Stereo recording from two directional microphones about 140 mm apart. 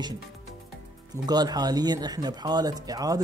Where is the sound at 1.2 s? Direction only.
30° right (ahead or behind).